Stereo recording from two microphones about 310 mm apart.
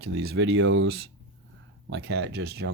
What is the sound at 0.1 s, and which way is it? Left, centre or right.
Speech, right.